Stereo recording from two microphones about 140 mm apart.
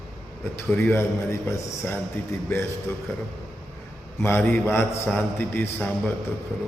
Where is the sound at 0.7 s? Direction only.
15° left (ahead or behind).